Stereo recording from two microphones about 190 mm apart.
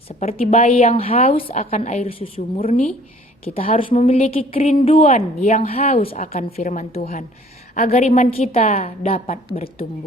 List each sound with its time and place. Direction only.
0.2 s a woman's voice: 35° left (ahead or behind)
3.4 s a woman's voice: 30° left (ahead or behind)